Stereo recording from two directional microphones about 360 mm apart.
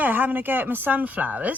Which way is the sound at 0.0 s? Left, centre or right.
Centre.